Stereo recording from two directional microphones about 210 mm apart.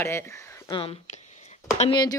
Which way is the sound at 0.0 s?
10° left (ahead or behind).